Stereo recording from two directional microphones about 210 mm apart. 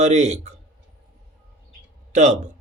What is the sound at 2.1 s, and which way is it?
Speech, 35° right (ahead or behind).